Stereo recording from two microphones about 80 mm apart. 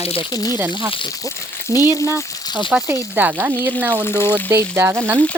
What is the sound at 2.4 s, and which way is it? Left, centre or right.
Speech, left.